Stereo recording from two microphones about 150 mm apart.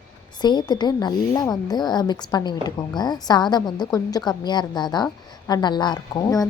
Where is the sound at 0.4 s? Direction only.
30° left (ahead or behind).